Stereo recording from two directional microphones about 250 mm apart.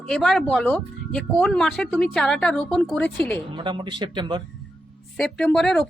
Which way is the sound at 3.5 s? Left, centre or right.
Centre.